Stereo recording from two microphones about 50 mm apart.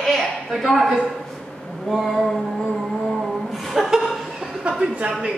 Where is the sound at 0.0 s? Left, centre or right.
Centre.